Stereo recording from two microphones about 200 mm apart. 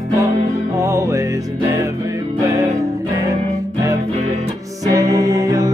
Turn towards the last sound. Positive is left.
turn(degrees=-15)  # may be behind; listen again after turning